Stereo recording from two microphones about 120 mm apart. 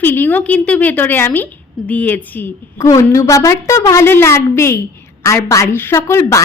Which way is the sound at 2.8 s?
25° left (ahead or behind).